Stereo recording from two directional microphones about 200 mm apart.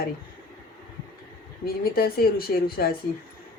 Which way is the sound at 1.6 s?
50° left (ahead or behind).